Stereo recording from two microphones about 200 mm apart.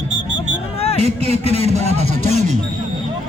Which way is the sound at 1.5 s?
30° left (ahead or behind).